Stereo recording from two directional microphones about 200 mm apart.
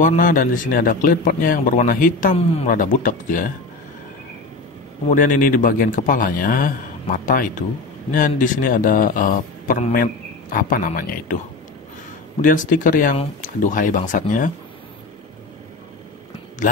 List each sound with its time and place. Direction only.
0.0 s a man's voice: 40° left (ahead or behind)
5.1 s a man's voice: 40° left (ahead or behind)
12.4 s speech: 40° left (ahead or behind)